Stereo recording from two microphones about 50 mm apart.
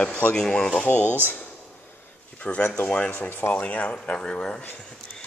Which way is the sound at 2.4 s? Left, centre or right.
Left.